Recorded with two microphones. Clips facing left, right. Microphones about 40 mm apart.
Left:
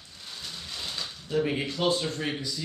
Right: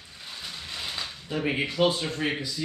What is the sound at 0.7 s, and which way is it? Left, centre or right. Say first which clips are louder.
Speech: right 2 dB; centre.